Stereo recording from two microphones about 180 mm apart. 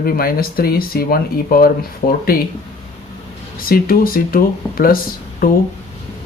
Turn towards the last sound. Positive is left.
turn(degrees=55)  # may be behind; listen again after turning